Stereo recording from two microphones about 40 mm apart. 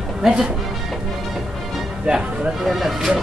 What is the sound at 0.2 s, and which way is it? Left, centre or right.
Speech, centre.